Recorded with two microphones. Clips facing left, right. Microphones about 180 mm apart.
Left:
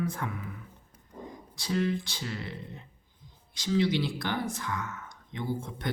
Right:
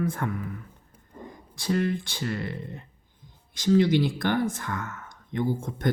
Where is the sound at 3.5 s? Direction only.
50° right (ahead or behind).